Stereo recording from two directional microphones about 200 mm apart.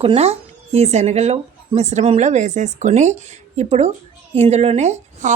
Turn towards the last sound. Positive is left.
turn(degrees=-35)  # may be behind; listen again after turning